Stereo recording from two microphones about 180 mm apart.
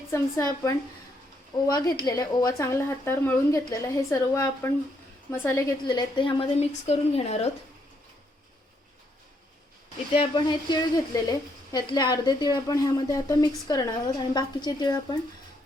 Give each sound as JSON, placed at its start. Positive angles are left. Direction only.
{"t": 0.1, "sound": "a woman's voice", "side_deg": 15}
{"t": 10.2, "sound": "speech", "side_deg": 25}